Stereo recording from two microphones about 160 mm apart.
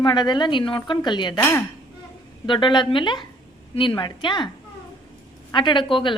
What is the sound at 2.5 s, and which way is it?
A woman's voice, 30° left (ahead or behind).